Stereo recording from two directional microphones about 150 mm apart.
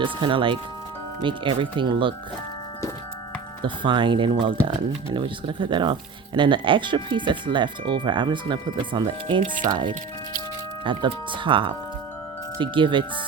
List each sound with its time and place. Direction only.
0.0 s speech: 35° right (ahead or behind)
3.6 s speech: 35° right (ahead or behind)